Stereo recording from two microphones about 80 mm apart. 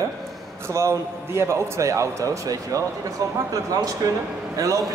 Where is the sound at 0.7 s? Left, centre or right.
Right.